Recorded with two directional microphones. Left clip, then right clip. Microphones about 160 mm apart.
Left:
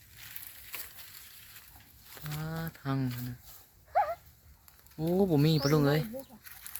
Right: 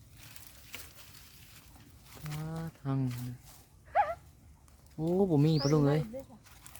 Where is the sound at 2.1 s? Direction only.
Centre (ahead or behind).